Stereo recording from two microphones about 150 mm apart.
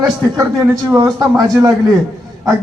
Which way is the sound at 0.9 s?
30° right (ahead or behind).